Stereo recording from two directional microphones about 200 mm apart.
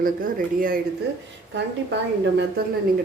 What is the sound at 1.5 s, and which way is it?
A woman's voice, 65° right (ahead or behind).